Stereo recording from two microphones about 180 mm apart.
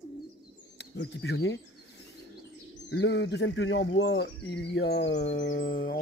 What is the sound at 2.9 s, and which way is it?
Speech, 85° left.